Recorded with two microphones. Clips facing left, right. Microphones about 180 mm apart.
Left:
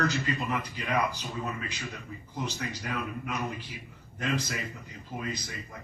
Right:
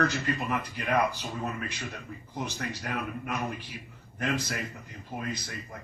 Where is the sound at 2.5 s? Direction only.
60° right (ahead or behind).